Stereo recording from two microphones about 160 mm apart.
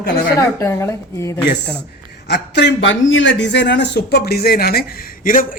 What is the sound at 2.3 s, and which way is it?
A man's voice, 90° left.